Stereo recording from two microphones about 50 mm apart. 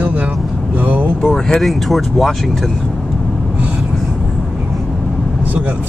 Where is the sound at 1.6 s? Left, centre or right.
Centre.